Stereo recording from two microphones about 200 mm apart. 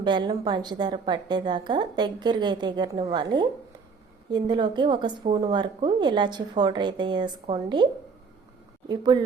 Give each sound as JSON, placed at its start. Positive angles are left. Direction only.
{"t": 0.0, "sound": "a woman's voice", "side_deg": -20}
{"t": 8.9, "sound": "a woman's voice", "side_deg": -20}